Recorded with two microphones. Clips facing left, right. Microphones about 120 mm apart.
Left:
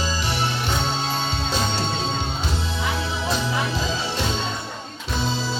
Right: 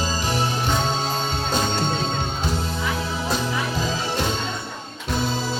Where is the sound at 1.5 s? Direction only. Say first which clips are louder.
Right 3 dB; 50° right (ahead or behind).